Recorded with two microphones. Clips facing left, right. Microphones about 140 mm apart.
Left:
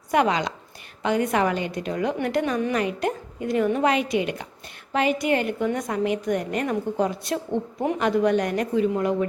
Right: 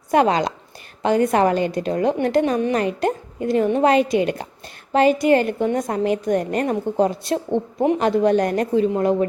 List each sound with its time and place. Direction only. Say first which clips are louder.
0.1 s a woman's voice: right 4 dB; 35° right (ahead or behind)
2.7 s a woman's voice: right 4 dB; 35° right (ahead or behind)